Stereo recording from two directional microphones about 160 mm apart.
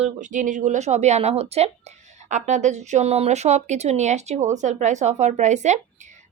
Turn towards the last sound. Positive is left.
turn(degrees=-45)  # may be behind; listen again after turning